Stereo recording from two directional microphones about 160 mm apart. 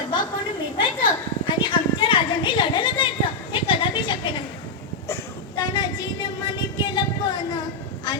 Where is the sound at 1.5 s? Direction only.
30° left (ahead or behind).